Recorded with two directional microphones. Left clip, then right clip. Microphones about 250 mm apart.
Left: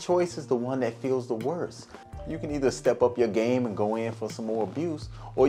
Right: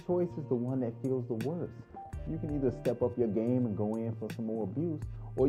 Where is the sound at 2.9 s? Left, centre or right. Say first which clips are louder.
Left 10 dB; left.